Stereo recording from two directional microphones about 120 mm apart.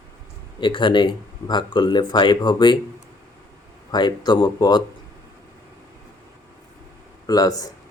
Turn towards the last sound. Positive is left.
turn(degrees=30)  # may be behind; listen again after turning